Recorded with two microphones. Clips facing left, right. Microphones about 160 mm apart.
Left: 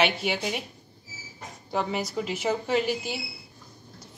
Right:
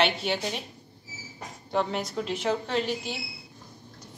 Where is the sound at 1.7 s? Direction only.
5° left (ahead or behind).